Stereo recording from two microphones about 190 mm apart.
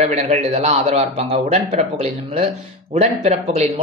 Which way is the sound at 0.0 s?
35° right (ahead or behind).